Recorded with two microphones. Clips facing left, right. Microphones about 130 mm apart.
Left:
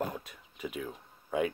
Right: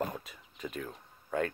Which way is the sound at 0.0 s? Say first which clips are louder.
Even; centre (ahead or behind).